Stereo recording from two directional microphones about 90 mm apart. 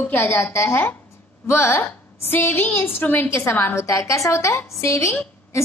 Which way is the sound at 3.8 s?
35° left (ahead or behind).